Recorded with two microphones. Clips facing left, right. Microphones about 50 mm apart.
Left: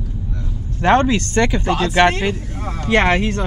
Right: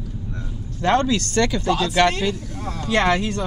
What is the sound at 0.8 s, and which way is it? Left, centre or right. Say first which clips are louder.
Speech: left 4 dB; left.